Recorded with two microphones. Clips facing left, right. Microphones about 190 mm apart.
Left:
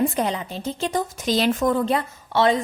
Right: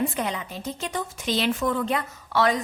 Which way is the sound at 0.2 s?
35° left (ahead or behind).